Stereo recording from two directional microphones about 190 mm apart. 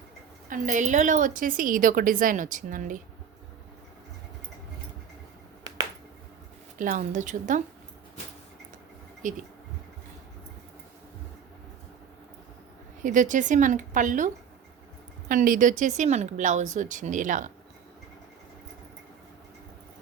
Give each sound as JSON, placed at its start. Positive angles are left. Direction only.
{"t": 0.5, "sound": "a woman's voice", "side_deg": -40}
{"t": 6.7, "sound": "speech", "side_deg": -40}
{"t": 9.2, "sound": "a woman's voice", "side_deg": -45}
{"t": 13.0, "sound": "speech", "side_deg": -40}
{"t": 15.3, "sound": "speech", "side_deg": -45}